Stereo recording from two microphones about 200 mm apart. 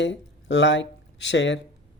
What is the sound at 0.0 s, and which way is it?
Speech, 60° left (ahead or behind).